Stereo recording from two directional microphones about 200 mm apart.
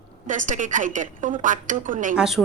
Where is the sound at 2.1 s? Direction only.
Centre (ahead or behind).